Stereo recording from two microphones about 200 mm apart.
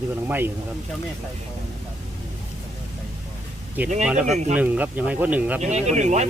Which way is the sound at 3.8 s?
10° right (ahead or behind).